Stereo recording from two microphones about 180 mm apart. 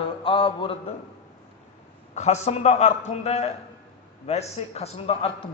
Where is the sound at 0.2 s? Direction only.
30° left (ahead or behind).